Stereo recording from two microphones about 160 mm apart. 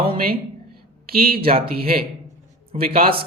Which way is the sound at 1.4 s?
35° right (ahead or behind).